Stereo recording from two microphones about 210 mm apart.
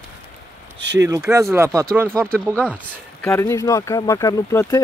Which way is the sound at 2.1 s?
5° left (ahead or behind).